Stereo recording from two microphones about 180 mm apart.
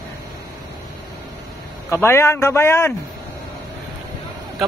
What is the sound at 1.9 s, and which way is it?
Speech, 15° left (ahead or behind).